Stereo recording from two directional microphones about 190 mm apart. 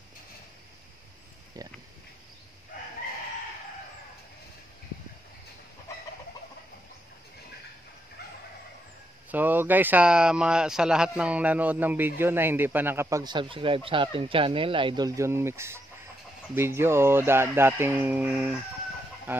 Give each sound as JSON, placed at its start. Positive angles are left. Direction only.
{"t": 1.6, "sound": "speech", "side_deg": -20}
{"t": 9.3, "sound": "speech", "side_deg": -10}